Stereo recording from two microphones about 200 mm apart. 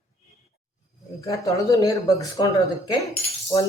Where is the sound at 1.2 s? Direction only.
15° left (ahead or behind).